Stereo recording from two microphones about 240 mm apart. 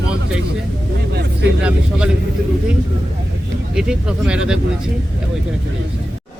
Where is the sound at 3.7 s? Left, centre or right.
Centre.